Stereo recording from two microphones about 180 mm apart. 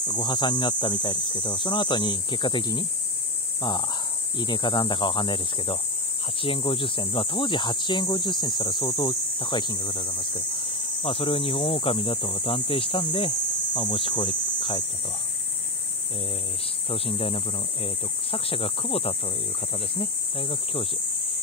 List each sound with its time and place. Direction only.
0.1 s speech: 25° left (ahead or behind)
16.9 s speech: 30° left (ahead or behind)